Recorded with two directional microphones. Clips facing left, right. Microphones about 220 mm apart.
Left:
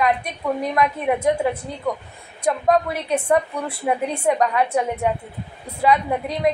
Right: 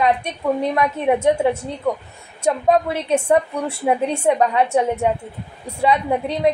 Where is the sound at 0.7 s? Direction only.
25° right (ahead or behind).